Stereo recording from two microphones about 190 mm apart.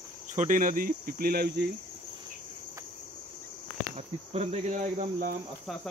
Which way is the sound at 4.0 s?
35° right (ahead or behind).